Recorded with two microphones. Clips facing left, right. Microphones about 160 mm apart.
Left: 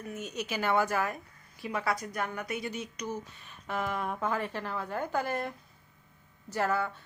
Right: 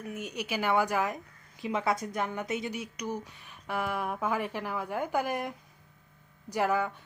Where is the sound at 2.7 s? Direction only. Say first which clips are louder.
Right 1 dB; 10° right (ahead or behind).